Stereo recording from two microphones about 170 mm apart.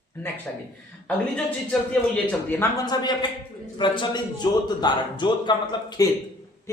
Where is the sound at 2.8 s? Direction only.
25° left (ahead or behind).